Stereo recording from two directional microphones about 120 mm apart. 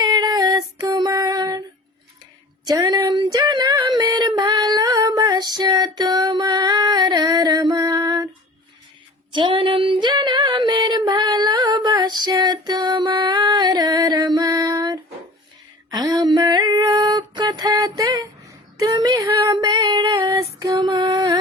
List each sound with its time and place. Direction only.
0.0 s female singing: 35° right (ahead or behind)
2.6 s child singing: 35° right (ahead or behind)
9.3 s female singing: 45° right (ahead or behind); by 19.5 s 25° right (ahead or behind)
19.5 s a sound: 40° right (ahead or behind)
20.3 s female singing: 30° right (ahead or behind)